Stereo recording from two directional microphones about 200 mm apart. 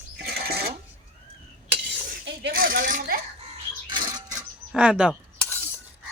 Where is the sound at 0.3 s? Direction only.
55° right (ahead or behind).